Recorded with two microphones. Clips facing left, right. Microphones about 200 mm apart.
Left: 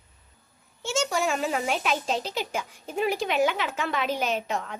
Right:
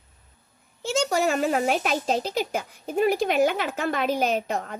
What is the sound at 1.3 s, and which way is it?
A woman's voice, 50° right (ahead or behind).